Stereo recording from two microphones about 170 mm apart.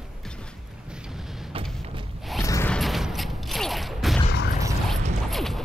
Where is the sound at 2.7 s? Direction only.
Centre (ahead or behind).